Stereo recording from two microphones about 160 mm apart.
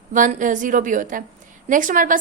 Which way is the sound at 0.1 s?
55° right (ahead or behind).